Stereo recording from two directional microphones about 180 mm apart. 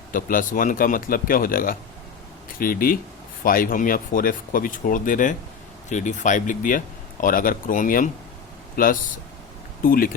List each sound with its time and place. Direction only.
0.1 s speech: 50° left (ahead or behind)